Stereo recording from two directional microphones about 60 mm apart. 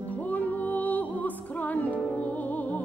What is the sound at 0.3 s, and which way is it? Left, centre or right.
Music, left.